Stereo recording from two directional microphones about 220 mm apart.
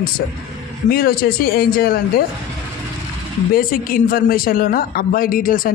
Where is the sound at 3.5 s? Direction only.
40° left (ahead or behind).